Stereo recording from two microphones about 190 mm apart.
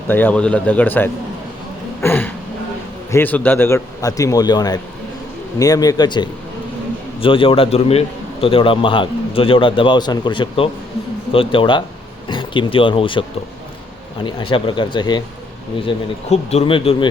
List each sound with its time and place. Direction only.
0.1 s a man's voice: 10° left (ahead or behind)
2.0 s a sound: 10° left (ahead or behind)
3.1 s a man's voice: 10° left (ahead or behind); by 13.2 s 25° left (ahead or behind)
14.3 s a man's voice: 25° left (ahead or behind)